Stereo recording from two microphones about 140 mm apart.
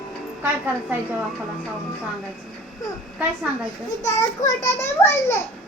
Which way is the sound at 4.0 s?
20° left (ahead or behind).